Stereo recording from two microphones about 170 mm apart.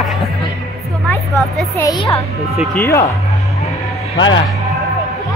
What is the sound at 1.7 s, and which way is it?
Speech, 25° left (ahead or behind).